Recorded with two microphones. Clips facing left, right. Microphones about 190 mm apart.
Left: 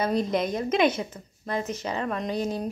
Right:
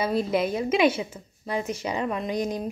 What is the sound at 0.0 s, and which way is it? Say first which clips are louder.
A woman's voice: right 1 dB; 5° right (ahead or behind).